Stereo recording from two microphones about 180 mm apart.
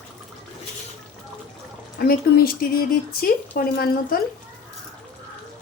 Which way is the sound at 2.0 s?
55° left (ahead or behind).